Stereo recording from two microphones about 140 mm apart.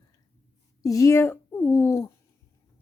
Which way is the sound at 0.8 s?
25° left (ahead or behind).